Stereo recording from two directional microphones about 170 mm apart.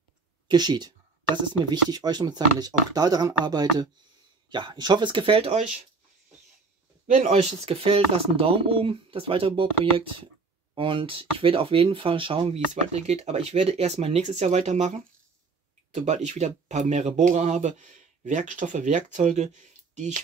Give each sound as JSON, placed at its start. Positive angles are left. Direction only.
{"t": 0.5, "sound": "speech", "side_deg": -25}
{"t": 7.1, "sound": "speech", "side_deg": -40}
{"t": 15.9, "sound": "speech", "side_deg": -45}